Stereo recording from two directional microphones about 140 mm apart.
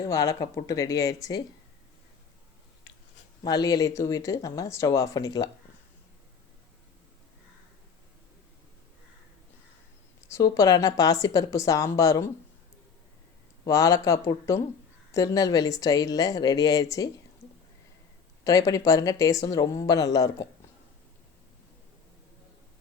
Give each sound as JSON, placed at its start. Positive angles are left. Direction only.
{"t": 0.1, "sound": "speech", "side_deg": 25}
{"t": 3.4, "sound": "speech", "side_deg": 30}
{"t": 10.2, "sound": "speech", "side_deg": 20}
{"t": 13.7, "sound": "speech", "side_deg": 25}
{"t": 18.4, "sound": "speech", "side_deg": 25}